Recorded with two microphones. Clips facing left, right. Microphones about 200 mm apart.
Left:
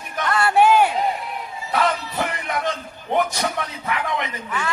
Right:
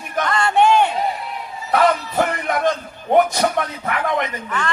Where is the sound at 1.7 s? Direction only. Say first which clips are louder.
Right 5 dB; 50° right (ahead or behind).